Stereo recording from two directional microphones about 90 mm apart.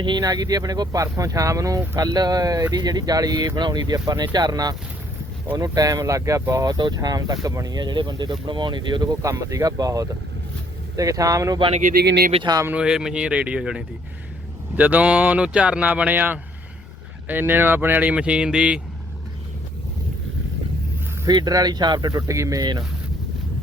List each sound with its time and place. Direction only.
0.0 s speech: 55° right (ahead or behind); by 6.7 s 35° right (ahead or behind)
6.7 s speech: 50° right (ahead or behind)
12.7 s speech: 10° right (ahead or behind)
21.2 s speech: 50° right (ahead or behind)
22.3 s speech: 35° right (ahead or behind)